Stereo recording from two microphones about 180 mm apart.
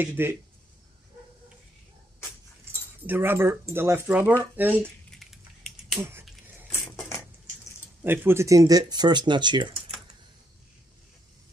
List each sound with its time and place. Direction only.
0.0 s speech: 10° right (ahead or behind)
3.1 s speech: 10° right (ahead or behind)
4.6 s a sound: 10° right (ahead or behind)
5.9 s finger snapping: 10° right (ahead or behind)
7.0 s a sound: 15° left (ahead or behind)
8.0 s speech: 10° right (ahead or behind)